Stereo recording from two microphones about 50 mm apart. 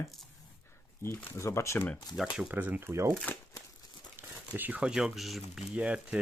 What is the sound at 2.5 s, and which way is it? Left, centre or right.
Speech, right.